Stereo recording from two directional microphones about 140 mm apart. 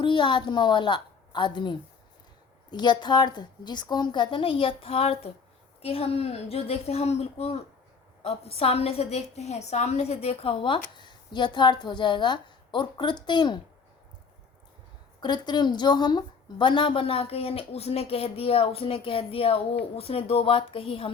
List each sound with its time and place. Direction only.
0.0 s a woman's voice: 35° left (ahead or behind)
15.2 s a woman's voice: 30° left (ahead or behind)